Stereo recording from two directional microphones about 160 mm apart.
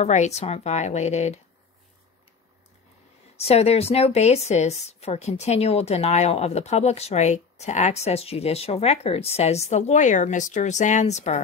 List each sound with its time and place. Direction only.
0.0 s a woman's voice: 45° left (ahead or behind)
3.3 s a woman's voice: 40° left (ahead or behind)